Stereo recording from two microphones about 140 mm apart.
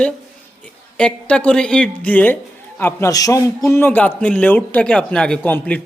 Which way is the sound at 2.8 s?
20° left (ahead or behind).